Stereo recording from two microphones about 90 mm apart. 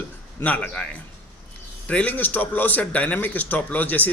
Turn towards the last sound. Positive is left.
turn(degrees=20)  # may be behind; listen again after turning